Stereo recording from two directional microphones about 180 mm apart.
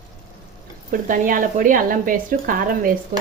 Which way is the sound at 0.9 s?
50° right (ahead or behind).